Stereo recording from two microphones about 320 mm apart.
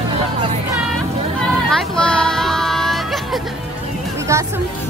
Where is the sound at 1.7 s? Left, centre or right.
Centre.